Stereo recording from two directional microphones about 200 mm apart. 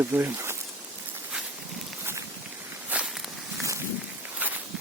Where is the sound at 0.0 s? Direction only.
10° right (ahead or behind).